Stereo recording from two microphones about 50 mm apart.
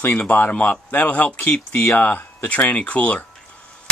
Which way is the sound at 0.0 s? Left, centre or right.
Left.